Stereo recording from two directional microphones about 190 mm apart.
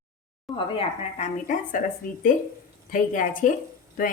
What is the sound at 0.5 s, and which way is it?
Speech, 35° left (ahead or behind).